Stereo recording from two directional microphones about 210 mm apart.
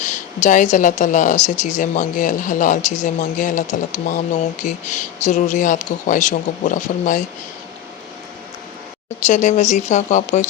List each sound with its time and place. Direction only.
0.0 s a woman's voice: 35° left (ahead or behind)
9.2 s a woman's voice: 35° left (ahead or behind)